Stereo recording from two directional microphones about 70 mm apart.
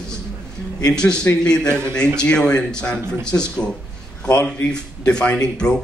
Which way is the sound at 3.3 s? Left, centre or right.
Left.